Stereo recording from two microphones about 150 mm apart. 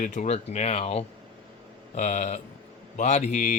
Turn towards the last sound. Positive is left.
turn(degrees=50)  # may be behind; listen again after turning